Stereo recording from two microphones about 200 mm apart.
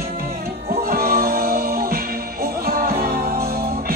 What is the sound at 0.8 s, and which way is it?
Music, 45° right (ahead or behind).